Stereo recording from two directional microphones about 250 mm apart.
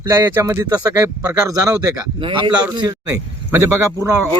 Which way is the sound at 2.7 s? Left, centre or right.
Centre.